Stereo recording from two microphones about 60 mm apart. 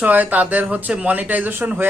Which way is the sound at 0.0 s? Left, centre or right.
Right.